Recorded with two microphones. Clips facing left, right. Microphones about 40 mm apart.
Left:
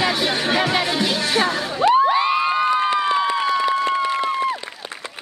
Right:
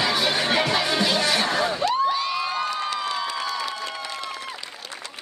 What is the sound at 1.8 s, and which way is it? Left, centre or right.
Cheering, left.